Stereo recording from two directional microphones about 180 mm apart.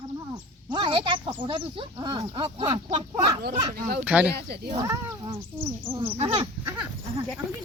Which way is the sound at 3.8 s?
55° right (ahead or behind).